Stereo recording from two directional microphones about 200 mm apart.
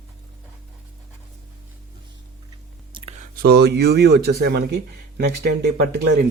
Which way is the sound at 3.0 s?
25° right (ahead or behind).